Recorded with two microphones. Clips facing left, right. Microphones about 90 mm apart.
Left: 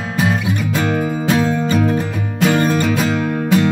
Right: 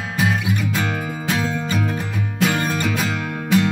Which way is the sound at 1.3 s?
45° left (ahead or behind).